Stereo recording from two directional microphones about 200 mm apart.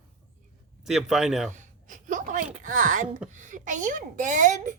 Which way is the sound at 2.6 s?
40° right (ahead or behind).